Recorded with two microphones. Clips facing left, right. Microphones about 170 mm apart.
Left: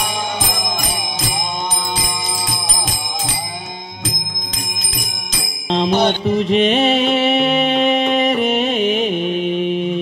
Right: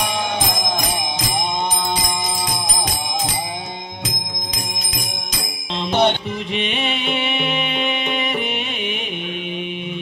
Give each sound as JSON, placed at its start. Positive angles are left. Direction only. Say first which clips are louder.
{"t": 6.2, "sound": "music", "louder": "left 10 dB", "side_deg": 35}